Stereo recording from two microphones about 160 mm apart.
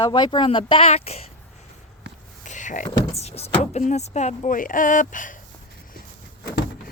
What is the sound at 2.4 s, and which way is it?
Speech, 50° left (ahead or behind).